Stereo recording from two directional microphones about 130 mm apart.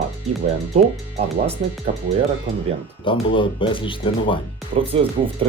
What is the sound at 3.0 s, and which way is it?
Speech, 40° left (ahead or behind).